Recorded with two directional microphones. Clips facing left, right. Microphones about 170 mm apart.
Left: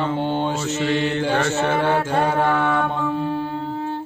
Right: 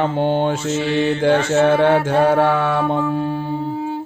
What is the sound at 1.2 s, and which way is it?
Mantra, 65° right (ahead or behind).